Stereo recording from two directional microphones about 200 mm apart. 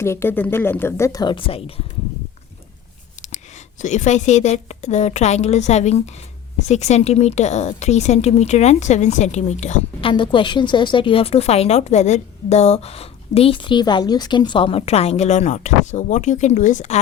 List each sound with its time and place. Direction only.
0.0 s a woman's voice: 10° left (ahead or behind); by 1.7 s 30° left (ahead or behind)
3.2 s a woman's voice: 35° left (ahead or behind)